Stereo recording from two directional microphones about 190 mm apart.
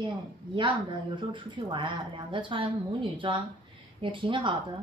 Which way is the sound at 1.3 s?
25° right (ahead or behind).